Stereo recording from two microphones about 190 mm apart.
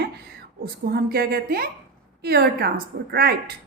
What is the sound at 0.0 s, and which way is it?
A woman's voice, 55° right (ahead or behind).